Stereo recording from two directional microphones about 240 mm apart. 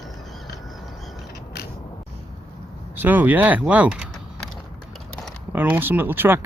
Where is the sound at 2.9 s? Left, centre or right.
Centre.